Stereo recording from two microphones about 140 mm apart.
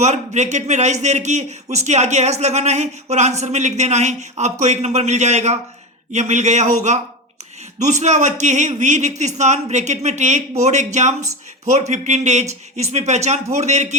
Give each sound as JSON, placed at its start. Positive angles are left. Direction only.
{"t": 0.0, "sound": "speech", "side_deg": -55}